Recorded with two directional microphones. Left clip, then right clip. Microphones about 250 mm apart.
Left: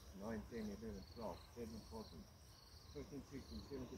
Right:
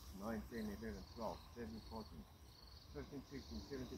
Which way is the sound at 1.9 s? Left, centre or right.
Right.